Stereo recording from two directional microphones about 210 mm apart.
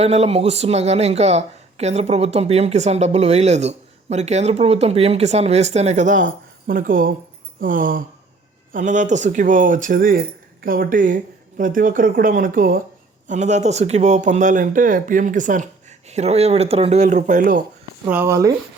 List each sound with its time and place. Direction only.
0.0 s speech: 30° right (ahead or behind)
18.1 s speech: 10° right (ahead or behind)